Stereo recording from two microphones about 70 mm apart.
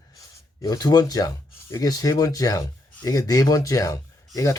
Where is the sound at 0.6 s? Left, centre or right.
Left.